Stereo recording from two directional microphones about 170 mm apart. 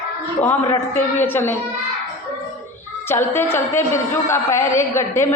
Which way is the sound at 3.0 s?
15° left (ahead or behind).